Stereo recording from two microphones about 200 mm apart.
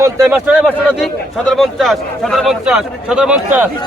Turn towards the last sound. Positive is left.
turn(degrees=-5)  # may be behind; listen again after turning